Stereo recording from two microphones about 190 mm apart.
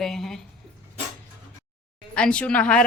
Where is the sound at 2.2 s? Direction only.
5° left (ahead or behind).